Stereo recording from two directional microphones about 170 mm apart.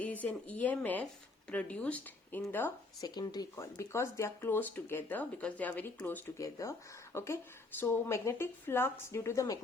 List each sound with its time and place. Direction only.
0.0 s speech: 10° left (ahead or behind)